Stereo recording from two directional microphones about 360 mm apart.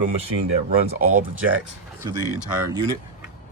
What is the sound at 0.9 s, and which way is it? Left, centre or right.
Speech, right.